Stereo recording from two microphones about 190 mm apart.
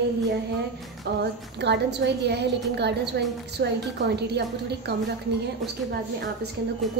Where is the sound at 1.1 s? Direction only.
55° right (ahead or behind).